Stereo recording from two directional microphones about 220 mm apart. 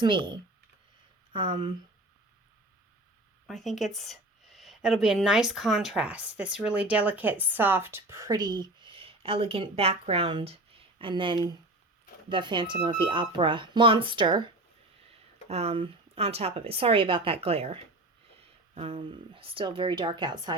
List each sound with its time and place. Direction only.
0.0 s speech: 20° right (ahead or behind)
3.4 s a woman's voice: centre (ahead or behind); by 20.5 s 20° right (ahead or behind)